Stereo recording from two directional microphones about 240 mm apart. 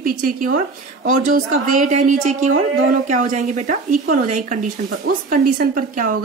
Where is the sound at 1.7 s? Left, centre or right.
Right.